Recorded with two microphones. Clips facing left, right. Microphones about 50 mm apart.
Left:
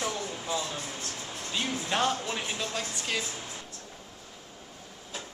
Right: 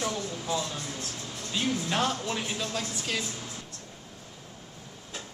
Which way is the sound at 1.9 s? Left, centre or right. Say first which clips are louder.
Even; centre.